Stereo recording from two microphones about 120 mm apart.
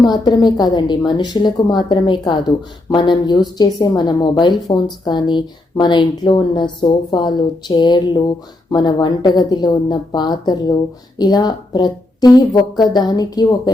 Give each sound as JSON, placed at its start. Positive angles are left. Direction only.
{"t": 0.0, "sound": "a woman's voice", "side_deg": 35}